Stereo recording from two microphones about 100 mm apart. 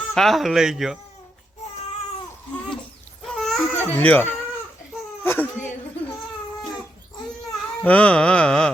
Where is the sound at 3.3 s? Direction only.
5° left (ahead or behind).